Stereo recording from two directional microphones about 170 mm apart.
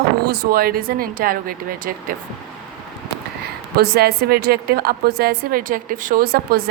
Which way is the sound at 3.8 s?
70° right (ahead or behind).